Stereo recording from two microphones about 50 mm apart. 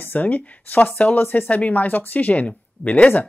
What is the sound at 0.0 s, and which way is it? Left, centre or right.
Speech, left.